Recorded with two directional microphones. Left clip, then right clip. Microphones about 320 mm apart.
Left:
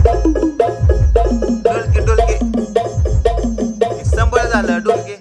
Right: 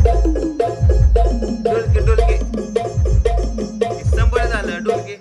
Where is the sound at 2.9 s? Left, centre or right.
Left.